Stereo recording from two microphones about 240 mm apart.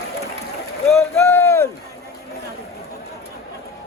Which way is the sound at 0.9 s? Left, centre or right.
Centre.